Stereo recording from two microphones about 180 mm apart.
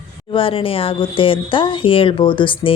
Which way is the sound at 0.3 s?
30° left (ahead or behind).